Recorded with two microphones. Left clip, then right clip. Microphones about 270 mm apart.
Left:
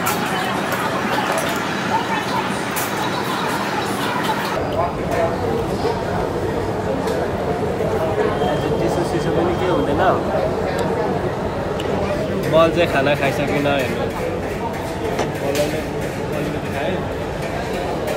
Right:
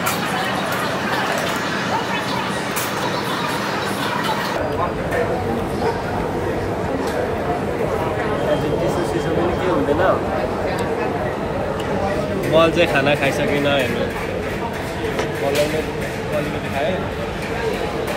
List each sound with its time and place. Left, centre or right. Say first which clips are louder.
12.5 s speech: even; centre